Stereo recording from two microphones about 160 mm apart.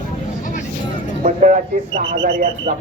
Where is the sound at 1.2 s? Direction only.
50° right (ahead or behind).